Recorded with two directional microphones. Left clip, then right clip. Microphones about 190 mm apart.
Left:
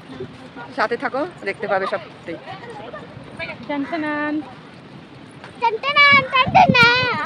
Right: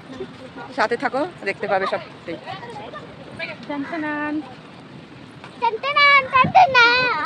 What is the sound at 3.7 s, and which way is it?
Speech, 65° left (ahead or behind).